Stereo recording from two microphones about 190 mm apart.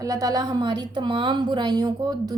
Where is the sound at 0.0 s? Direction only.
20° right (ahead or behind).